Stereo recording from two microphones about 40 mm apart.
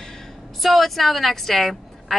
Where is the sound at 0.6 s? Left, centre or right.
Centre.